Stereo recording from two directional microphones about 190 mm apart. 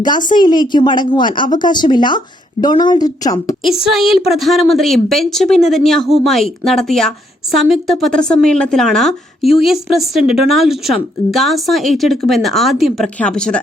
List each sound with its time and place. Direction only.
0.0 s a woman's voice: 25° left (ahead or behind)
3.6 s a woman's voice: centre (ahead or behind)